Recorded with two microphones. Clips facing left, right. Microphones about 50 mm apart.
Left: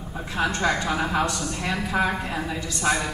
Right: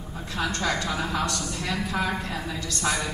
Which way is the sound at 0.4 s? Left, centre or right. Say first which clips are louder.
Left 3 dB; centre.